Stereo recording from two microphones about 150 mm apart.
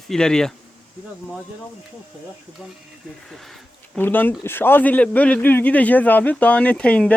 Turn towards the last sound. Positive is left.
turn(degrees=10)  # may be behind; listen again after turning